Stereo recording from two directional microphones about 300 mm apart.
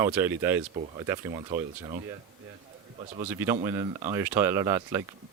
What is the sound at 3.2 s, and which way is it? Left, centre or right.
Speech, centre.